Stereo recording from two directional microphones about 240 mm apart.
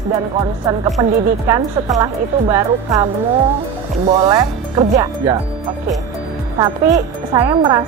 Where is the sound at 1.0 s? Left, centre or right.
Centre.